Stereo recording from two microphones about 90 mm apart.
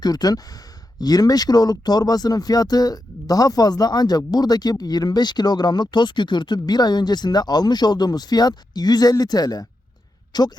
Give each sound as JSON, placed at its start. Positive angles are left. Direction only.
{"t": 0.0, "sound": "speech", "side_deg": 45}